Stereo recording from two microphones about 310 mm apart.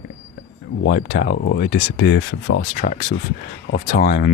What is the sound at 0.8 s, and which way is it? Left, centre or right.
Speech, left.